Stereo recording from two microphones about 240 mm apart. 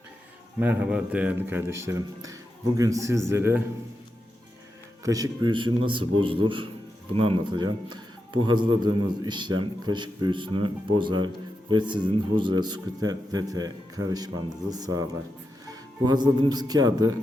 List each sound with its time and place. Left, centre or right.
0.6 s speech: centre
5.0 s speech: centre